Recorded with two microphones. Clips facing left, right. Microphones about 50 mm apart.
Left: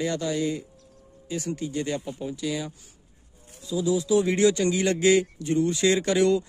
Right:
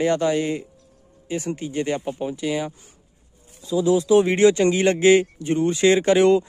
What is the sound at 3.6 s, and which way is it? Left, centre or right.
Speech, right.